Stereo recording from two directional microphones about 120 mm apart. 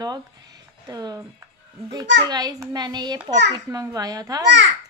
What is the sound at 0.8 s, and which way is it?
A child's voice, 30° right (ahead or behind).